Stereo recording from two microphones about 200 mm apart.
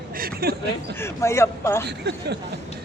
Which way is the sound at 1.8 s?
55° right (ahead or behind).